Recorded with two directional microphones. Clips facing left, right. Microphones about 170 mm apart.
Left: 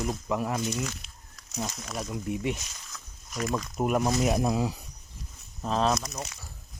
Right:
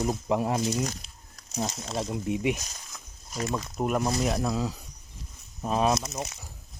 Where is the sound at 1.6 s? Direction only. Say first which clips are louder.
Right 5 dB; 25° right (ahead or behind).